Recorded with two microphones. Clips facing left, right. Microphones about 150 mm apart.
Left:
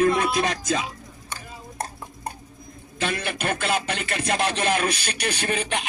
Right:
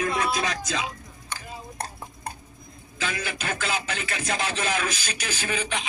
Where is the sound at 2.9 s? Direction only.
60° left (ahead or behind).